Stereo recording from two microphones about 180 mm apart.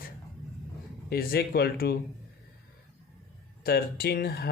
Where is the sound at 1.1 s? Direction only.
60° left (ahead or behind).